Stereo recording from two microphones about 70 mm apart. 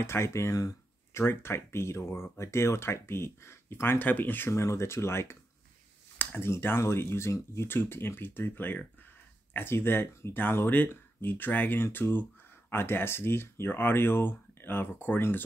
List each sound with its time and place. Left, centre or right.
0.0 s speech: left
1.2 s speech: left
4.0 s speech: left
4.5 s speech: left